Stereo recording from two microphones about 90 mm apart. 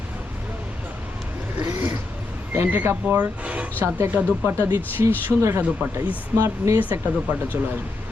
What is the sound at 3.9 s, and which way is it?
Speech, 25° right (ahead or behind).